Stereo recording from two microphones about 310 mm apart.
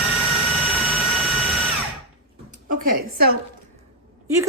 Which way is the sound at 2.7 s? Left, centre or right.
Right.